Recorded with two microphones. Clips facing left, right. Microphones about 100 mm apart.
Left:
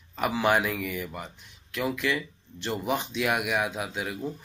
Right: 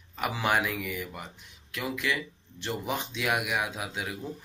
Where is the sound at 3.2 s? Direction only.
30° left (ahead or behind).